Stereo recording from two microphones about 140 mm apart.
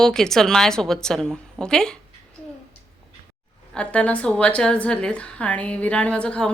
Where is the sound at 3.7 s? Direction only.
10° left (ahead or behind).